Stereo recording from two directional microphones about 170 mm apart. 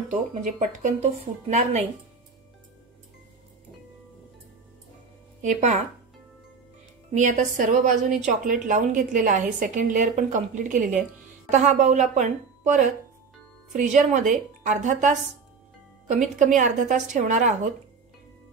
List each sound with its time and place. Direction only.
0.1 s a woman's voice: 45° right (ahead or behind)
5.4 s a woman's voice: 40° right (ahead or behind)
7.1 s a woman's voice: 50° right (ahead or behind)